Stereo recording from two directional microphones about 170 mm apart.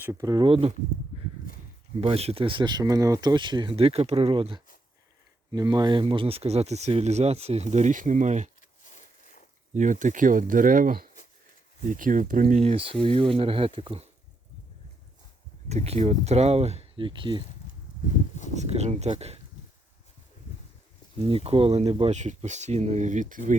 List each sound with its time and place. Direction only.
0.0 s speech: 15° right (ahead or behind)
2.0 s speech: 35° right (ahead or behind)
8.8 s a sound: 45° left (ahead or behind)
9.7 s speech: 50° right (ahead or behind); by 14.1 s 30° right (ahead or behind)
15.7 s speech: 40° right (ahead or behind)
18.5 s speech: 40° right (ahead or behind)
21.2 s speech: 35° right (ahead or behind)